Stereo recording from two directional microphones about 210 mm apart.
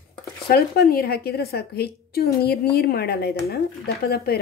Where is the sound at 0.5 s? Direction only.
45° left (ahead or behind).